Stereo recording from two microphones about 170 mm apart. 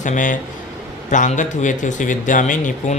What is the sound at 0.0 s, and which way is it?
Speech, 50° left (ahead or behind).